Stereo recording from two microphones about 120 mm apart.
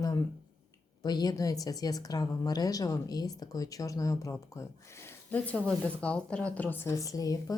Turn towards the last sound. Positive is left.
turn(degrees=30)  # may be behind; listen again after turning